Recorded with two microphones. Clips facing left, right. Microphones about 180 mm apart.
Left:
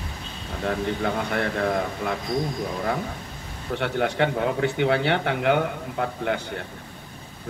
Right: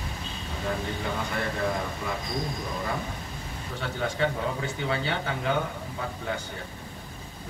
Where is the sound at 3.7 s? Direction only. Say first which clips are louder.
Left 6 dB; 65° left (ahead or behind).